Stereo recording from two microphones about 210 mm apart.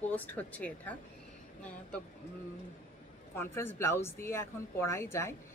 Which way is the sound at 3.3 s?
10° left (ahead or behind).